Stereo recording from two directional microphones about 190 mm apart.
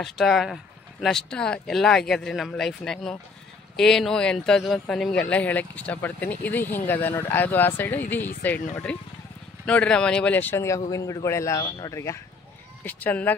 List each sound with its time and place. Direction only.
0.0 s a man's voice: centre (ahead or behind)